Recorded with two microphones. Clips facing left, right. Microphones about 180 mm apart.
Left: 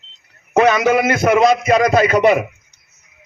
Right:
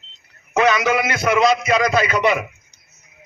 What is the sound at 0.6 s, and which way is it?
A man's voice, 50° left (ahead or behind).